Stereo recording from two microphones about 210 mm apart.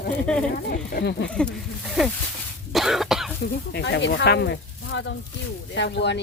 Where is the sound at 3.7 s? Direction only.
60° left (ahead or behind).